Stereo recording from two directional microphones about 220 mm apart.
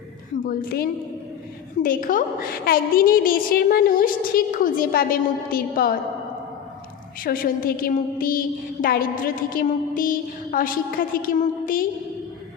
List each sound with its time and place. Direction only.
0.4 s a woman's voice: 45° left (ahead or behind)
7.3 s a woman's voice: 40° left (ahead or behind)